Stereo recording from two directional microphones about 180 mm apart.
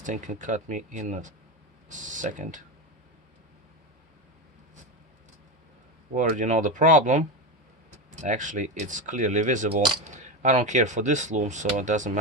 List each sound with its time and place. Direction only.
0.0 s speech: 45° right (ahead or behind)
6.1 s speech: 45° right (ahead or behind)